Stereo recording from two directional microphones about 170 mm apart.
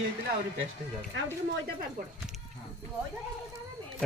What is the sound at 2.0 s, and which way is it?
Speech, 50° right (ahead or behind).